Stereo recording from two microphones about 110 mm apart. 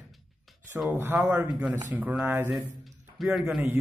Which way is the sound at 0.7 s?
15° right (ahead or behind).